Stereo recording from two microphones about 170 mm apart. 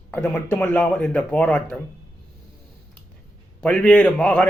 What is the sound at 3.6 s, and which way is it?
Speech, 5° left (ahead or behind).